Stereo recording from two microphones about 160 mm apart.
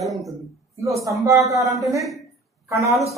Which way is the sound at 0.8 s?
20° right (ahead or behind).